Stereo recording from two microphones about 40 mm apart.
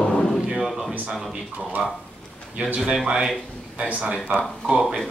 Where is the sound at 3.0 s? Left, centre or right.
Right.